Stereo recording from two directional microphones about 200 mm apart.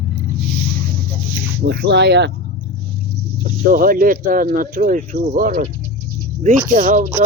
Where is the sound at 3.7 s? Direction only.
45° right (ahead or behind).